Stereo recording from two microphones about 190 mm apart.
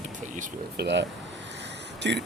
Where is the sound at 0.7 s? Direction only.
65° right (ahead or behind).